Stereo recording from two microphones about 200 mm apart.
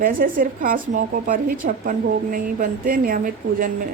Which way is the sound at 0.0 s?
45° right (ahead or behind).